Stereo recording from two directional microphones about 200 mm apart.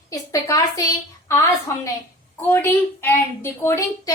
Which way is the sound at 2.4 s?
10° left (ahead or behind).